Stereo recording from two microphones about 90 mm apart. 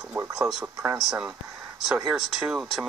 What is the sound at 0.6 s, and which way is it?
Speech, 25° right (ahead or behind).